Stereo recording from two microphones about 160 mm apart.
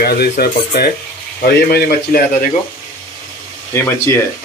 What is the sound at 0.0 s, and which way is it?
A man's voice, 75° left (ahead or behind).